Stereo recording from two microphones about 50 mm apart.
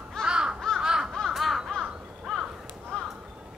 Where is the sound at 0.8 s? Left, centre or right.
Centre.